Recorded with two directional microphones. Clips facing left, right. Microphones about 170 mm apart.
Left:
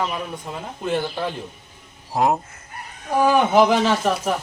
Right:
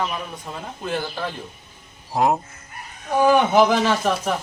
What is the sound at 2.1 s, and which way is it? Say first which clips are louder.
Speech: even; centre (ahead or behind).